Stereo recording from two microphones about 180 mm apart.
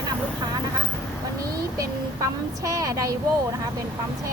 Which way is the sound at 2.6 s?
20° right (ahead or behind).